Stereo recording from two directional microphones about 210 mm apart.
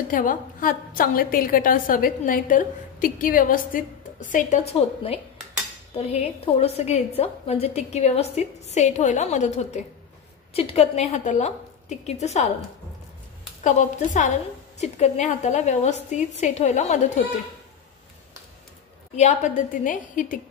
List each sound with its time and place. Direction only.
0.1 s a woman's voice: 40° left (ahead or behind)
13.7 s a woman's voice: 35° left (ahead or behind)
19.1 s a woman's voice: 35° left (ahead or behind)